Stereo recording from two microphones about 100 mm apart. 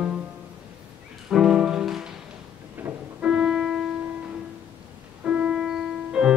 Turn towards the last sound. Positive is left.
turn(degrees=-5)  # may be behind; listen again after turning